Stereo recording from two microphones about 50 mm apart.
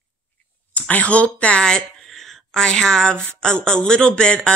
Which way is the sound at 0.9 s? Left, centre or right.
Left.